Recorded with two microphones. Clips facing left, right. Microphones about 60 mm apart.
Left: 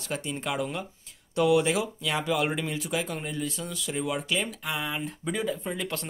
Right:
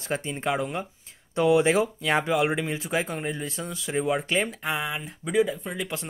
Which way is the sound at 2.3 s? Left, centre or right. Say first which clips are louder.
Right 3 dB; centre.